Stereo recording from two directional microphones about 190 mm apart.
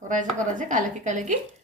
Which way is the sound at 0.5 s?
45° right (ahead or behind).